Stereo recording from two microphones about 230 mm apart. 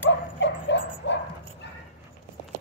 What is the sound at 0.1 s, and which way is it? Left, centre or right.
Dog, left.